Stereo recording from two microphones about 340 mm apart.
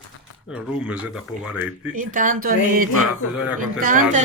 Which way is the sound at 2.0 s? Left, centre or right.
Right.